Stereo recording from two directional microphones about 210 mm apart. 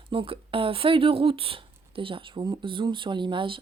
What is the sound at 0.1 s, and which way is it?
Speech, 25° right (ahead or behind).